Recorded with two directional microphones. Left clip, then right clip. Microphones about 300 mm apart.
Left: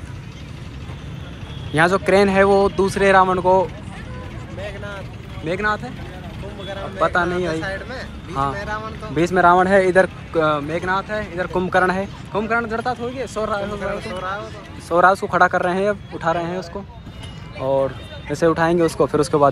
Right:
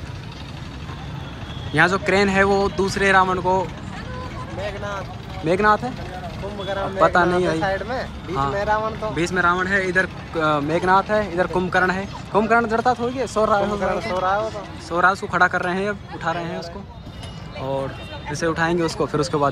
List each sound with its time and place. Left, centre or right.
1.8 s speech: centre
4.6 s vehicle: right
5.4 s speech: centre
7.0 s speech: centre
9.1 s speech: centre
12.9 s speech: centre
18.4 s speech: centre